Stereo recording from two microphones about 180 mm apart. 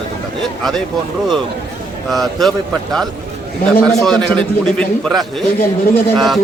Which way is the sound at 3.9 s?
5° left (ahead or behind).